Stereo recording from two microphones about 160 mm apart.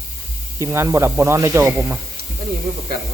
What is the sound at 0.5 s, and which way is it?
Speech, 15° right (ahead or behind).